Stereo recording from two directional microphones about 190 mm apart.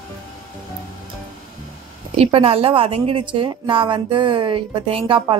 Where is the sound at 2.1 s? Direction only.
30° right (ahead or behind).